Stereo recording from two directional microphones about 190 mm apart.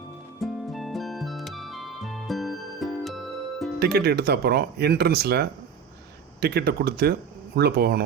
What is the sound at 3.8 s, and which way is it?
Speech, 60° right (ahead or behind).